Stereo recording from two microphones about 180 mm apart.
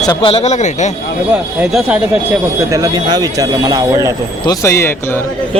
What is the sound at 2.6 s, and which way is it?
Speech, 20° right (ahead or behind).